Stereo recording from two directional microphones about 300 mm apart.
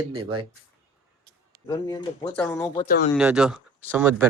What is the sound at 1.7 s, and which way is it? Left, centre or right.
Speech, centre.